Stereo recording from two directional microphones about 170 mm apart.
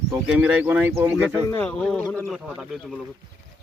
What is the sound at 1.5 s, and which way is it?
Speech, 10° left (ahead or behind).